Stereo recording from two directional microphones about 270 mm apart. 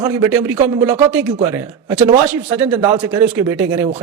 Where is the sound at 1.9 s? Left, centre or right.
Right.